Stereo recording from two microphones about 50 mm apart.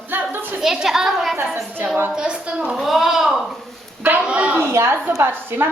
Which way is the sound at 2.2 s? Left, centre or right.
Centre.